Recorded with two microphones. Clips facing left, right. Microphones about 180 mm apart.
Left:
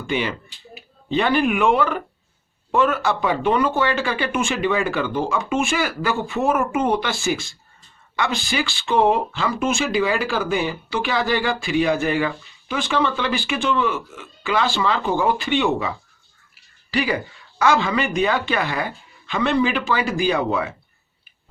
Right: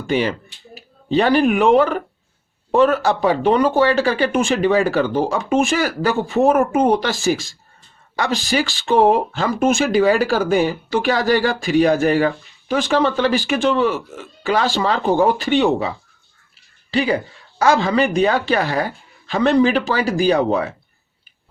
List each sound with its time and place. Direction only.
0.1 s speech: 40° right (ahead or behind)
16.9 s speech: 30° right (ahead or behind)